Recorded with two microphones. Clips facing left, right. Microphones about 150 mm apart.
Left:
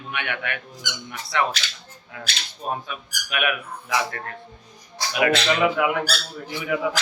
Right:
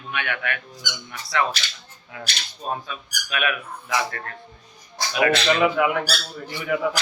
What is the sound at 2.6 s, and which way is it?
Speech, 15° left (ahead or behind).